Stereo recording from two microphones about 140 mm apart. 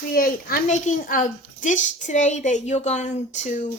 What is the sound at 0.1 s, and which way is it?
Speech, 90° left.